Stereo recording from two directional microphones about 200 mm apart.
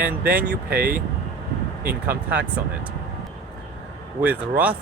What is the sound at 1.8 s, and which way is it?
Speech, 10° right (ahead or behind).